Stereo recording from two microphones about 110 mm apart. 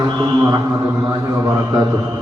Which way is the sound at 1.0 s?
25° right (ahead or behind).